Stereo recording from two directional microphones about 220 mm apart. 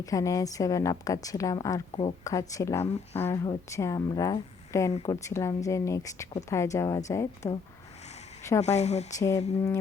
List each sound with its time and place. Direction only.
0.0 s speech: 15° left (ahead or behind)
2.8 s speech: 30° left (ahead or behind)
3.2 s speech: 15° left (ahead or behind)
8.6 s speech: 30° left (ahead or behind)